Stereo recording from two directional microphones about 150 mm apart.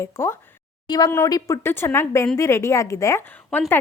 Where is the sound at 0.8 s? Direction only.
30° left (ahead or behind).